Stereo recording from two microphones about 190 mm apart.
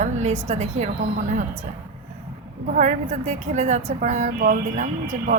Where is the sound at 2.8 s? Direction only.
40° right (ahead or behind).